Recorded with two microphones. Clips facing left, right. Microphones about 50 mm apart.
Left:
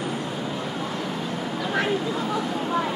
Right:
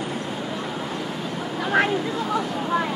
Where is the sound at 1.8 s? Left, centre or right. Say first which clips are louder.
Right 5 dB; right.